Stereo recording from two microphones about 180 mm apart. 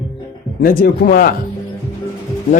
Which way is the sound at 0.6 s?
55° left (ahead or behind).